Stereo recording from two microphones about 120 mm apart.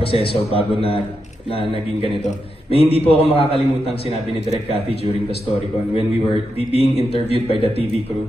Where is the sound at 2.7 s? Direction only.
50° left (ahead or behind).